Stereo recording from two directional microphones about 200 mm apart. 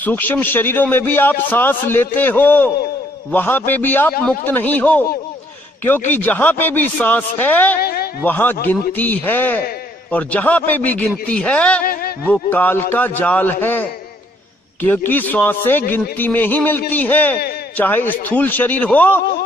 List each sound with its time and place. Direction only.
0.0 s a man's voice: 10° left (ahead or behind)
7.8 s a sound: 50° left (ahead or behind)
8.2 s a man's voice: 10° left (ahead or behind)
11.8 s a man's voice: 45° left (ahead or behind)
12.3 s a man's voice: 10° left (ahead or behind)